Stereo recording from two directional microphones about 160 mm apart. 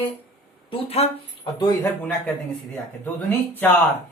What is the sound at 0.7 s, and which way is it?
Speech, 40° left (ahead or behind).